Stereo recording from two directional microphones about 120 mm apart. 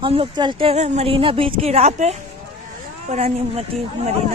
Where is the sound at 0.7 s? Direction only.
70° right (ahead or behind).